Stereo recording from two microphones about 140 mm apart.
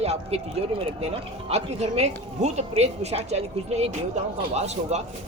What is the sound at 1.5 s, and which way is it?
A woman's voice, 50° right (ahead or behind).